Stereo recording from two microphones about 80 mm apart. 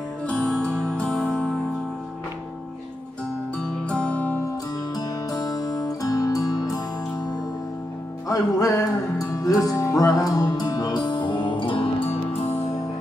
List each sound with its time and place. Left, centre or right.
0.3 s music: centre
3.9 s music: centre
4.9 s music: left
8.3 s music: left